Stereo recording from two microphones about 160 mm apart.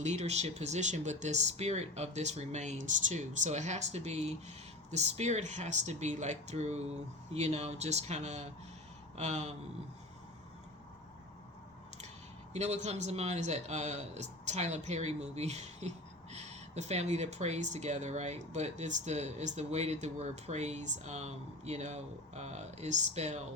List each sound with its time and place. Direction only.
0.0 s speech: 45° right (ahead or behind)
12.5 s speech: 45° right (ahead or behind)